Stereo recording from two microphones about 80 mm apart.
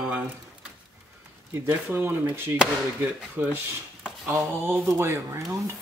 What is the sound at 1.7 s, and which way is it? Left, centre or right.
Speech, right.